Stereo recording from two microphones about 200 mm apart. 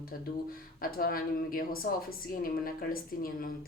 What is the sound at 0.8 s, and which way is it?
A woman's voice, 45° left (ahead or behind).